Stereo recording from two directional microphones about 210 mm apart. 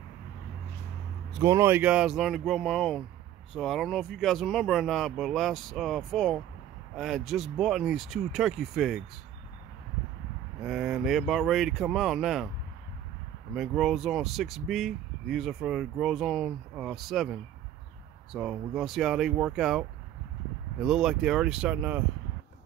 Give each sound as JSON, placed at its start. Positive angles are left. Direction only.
{"t": 1.4, "sound": "speech", "side_deg": -15}
{"t": 10.6, "sound": "speech", "side_deg": 0}
{"t": 13.6, "sound": "speech", "side_deg": 0}